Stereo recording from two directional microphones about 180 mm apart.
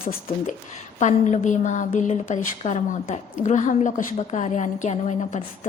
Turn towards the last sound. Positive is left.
turn(degrees=40)  # may be behind; listen again after turning